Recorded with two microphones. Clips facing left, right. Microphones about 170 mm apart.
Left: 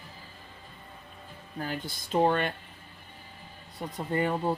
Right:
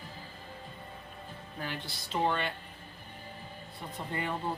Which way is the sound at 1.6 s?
45° left (ahead or behind).